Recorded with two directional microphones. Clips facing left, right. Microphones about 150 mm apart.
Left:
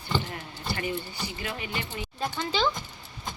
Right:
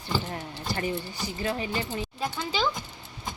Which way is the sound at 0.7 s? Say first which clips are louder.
Right 1 dB; 35° right (ahead or behind).